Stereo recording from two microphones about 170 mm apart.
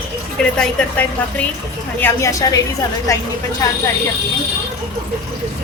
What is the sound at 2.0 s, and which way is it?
A woman's voice, 15° left (ahead or behind).